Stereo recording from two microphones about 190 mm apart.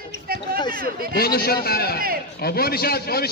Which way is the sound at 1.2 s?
55° left (ahead or behind).